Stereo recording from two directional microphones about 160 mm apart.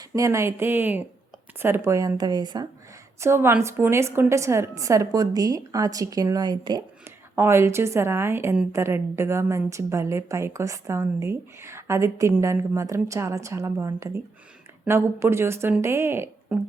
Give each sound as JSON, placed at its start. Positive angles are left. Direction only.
{"t": 0.1, "sound": "a woman's voice", "side_deg": -15}
{"t": 3.2, "sound": "a woman's voice", "side_deg": -15}
{"t": 7.0, "sound": "a woman's voice", "side_deg": -15}